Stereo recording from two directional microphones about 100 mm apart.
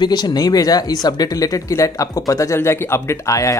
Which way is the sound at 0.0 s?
45° left (ahead or behind).